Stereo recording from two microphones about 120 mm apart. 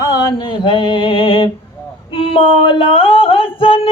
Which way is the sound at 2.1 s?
50° left (ahead or behind).